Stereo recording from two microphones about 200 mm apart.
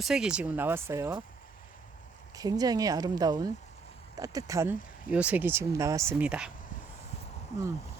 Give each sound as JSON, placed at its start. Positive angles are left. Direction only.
{"t": 0.0, "sound": "speech", "side_deg": -5}
{"t": 2.3, "sound": "speech", "side_deg": -20}
{"t": 7.5, "sound": "speech", "side_deg": 35}